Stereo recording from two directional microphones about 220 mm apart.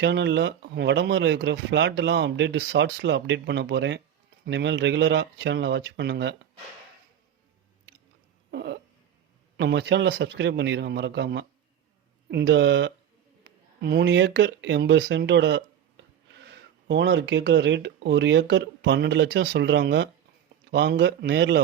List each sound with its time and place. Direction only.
0.0 s speech: 55° right (ahead or behind)
8.4 s a sound: 50° right (ahead or behind)
9.6 s speech: 50° right (ahead or behind)
16.9 s speech: 55° right (ahead or behind)